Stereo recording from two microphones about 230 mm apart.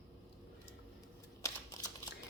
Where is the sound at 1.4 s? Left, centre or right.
Centre.